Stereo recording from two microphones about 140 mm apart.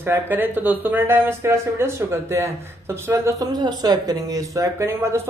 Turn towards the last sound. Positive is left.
turn(degrees=-20)  # may be behind; listen again after turning